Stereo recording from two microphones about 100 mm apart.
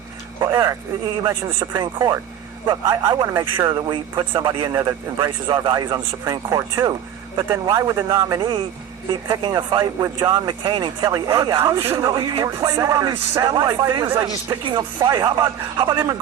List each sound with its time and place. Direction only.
0.3 s a sound: 35° right (ahead or behind)
1.7 s speech: 45° right (ahead or behind)
9.3 s speech: 45° right (ahead or behind)